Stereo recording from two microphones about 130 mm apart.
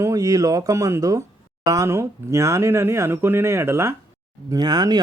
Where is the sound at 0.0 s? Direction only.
25° right (ahead or behind).